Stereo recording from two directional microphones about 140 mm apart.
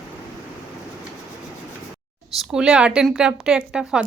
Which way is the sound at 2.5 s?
5° right (ahead or behind).